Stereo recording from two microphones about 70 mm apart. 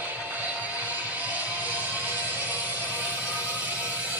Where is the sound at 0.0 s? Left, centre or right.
Right.